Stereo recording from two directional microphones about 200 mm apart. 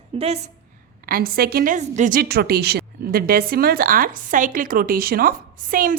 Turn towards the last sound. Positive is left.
turn(degrees=-45)  # may be behind; listen again after turning